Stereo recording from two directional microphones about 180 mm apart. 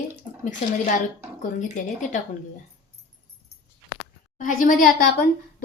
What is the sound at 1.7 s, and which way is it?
Speech, 45° left (ahead or behind).